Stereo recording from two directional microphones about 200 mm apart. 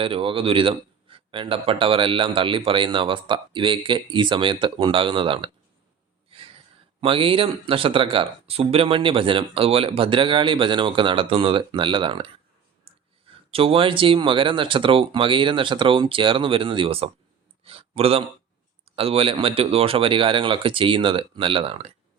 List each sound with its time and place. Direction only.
0.0 s speech: 25° right (ahead or behind)
7.0 s speech: 25° right (ahead or behind)
13.5 s speech: 30° right (ahead or behind)
17.6 s a sound: 30° right (ahead or behind)
18.9 s speech: 30° right (ahead or behind)